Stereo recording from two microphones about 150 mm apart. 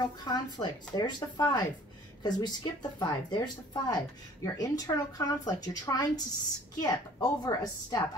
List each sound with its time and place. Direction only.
0.0 s speech: 30° left (ahead or behind)